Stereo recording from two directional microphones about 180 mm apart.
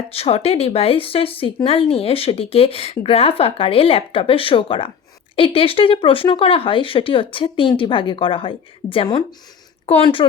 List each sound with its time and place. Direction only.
0.1 s speech: 35° left (ahead or behind)